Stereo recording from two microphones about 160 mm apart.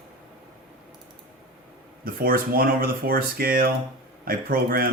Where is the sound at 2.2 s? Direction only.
65° right (ahead or behind).